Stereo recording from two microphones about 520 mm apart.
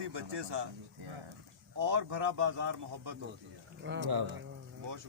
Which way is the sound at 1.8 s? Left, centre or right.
Right.